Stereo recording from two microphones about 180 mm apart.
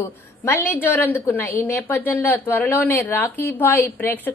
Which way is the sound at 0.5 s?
10° left (ahead or behind).